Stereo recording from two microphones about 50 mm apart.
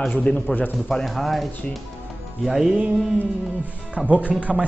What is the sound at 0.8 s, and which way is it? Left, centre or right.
Speech, centre.